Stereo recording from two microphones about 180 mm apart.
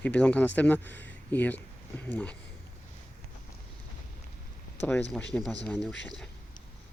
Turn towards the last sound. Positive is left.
turn(degrees=5)  # may be behind; listen again after turning